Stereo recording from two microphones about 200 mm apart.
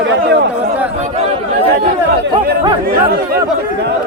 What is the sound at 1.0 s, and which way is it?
Speech, 30° right (ahead or behind).